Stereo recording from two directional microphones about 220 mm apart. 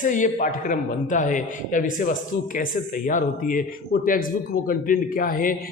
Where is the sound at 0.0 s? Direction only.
35° left (ahead or behind).